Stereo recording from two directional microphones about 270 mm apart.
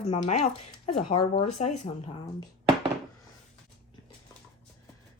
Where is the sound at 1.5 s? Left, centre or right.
Left.